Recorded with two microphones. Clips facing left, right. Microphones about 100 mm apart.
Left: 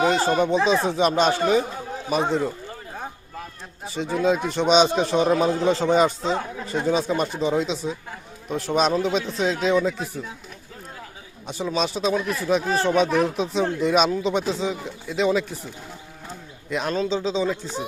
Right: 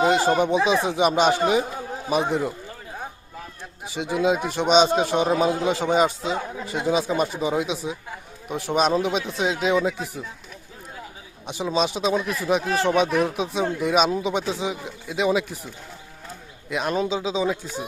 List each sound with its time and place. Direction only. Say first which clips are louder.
0.0 s speech: right 1 dB; 15° right (ahead or behind)
3.8 s speech: even; 15° right (ahead or behind)
11.4 s a man's voice: right 1 dB; 15° right (ahead or behind)